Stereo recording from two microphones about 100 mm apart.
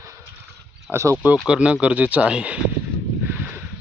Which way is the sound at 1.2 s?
15° right (ahead or behind).